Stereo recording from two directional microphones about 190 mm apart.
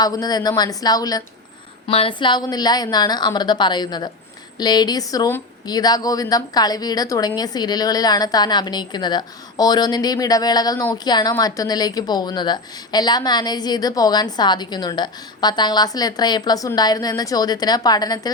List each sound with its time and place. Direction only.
0.0 s a woman's voice: 20° left (ahead or behind)